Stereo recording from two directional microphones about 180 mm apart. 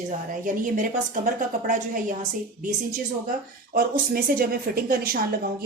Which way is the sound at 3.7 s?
55° right (ahead or behind).